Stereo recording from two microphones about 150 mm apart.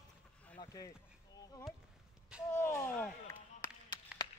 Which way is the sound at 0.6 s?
20° left (ahead or behind).